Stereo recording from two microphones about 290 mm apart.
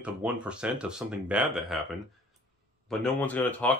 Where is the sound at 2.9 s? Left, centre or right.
Centre.